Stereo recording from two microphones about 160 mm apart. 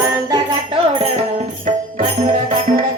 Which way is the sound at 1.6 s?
60° right (ahead or behind).